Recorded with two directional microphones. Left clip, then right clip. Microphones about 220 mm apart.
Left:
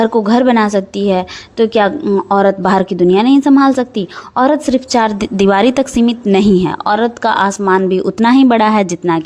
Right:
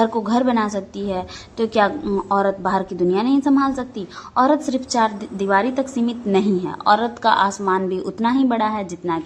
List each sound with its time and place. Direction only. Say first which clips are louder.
0.0 s a woman's voice: left 7 dB; 30° left (ahead or behind)